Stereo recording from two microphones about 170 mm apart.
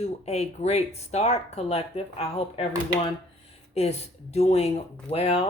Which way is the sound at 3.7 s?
40° left (ahead or behind).